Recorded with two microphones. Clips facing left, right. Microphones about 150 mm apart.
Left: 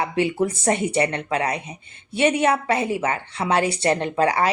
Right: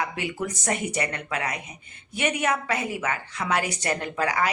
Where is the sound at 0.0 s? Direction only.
30° left (ahead or behind).